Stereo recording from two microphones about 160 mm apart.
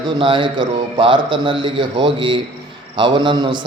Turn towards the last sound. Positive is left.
turn(degrees=-30)  # may be behind; listen again after turning